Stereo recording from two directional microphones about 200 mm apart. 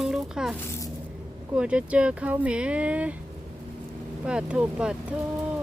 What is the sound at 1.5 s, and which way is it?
Speech, 5° right (ahead or behind).